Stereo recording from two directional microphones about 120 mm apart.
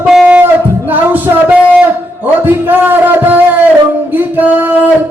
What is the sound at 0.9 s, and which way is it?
Music, 15° right (ahead or behind).